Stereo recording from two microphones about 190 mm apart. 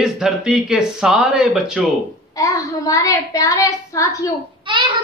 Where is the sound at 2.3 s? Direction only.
20° left (ahead or behind).